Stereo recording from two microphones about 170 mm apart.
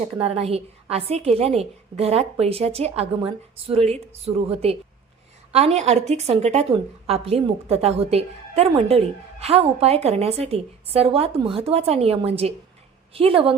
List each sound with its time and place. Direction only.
0.2 s a woman's voice: 35° right (ahead or behind)